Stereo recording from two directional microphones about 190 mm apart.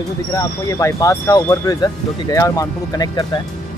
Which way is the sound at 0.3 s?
15° left (ahead or behind).